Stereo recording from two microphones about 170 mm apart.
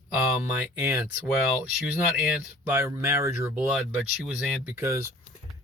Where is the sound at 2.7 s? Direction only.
15° right (ahead or behind).